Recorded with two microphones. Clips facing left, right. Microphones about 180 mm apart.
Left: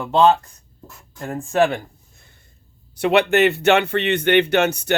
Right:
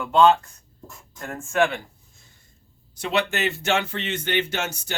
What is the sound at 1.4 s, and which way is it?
Speech, 35° left (ahead or behind).